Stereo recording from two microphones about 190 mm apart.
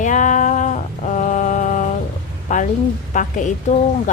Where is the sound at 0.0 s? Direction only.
40° left (ahead or behind).